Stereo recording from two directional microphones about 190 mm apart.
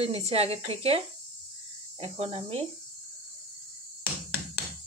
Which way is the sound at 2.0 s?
30° right (ahead or behind).